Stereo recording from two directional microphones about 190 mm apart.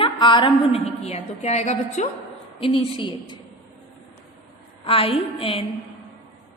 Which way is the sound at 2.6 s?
30° left (ahead or behind).